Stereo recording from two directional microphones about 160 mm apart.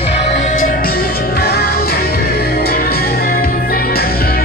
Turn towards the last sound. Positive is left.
turn(degrees=70)  # may be behind; listen again after turning